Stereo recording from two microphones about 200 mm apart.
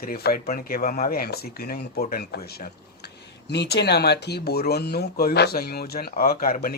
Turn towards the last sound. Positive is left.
turn(degrees=45)  # may be behind; listen again after turning